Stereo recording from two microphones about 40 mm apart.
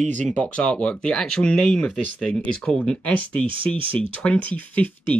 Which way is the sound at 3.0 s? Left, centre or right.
Left.